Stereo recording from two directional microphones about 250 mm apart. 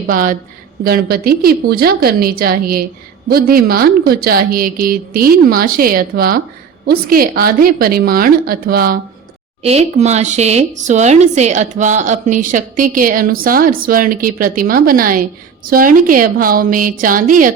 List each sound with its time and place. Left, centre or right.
0.1 s a woman's voice: right
9.6 s a woman's voice: right